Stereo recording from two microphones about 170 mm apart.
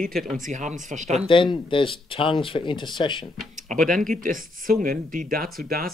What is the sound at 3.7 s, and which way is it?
Speech, 50° right (ahead or behind).